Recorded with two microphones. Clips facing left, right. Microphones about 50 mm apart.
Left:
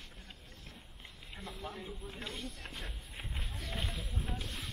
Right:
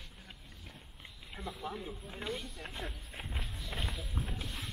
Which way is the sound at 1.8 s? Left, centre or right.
Centre.